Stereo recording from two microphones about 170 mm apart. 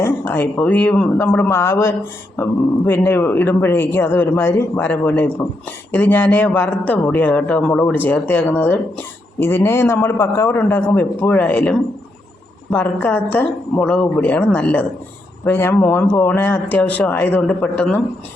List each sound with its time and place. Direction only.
0.0 s speech: 10° left (ahead or behind)